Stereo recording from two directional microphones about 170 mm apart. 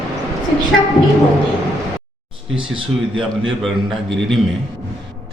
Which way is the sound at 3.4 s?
Centre (ahead or behind).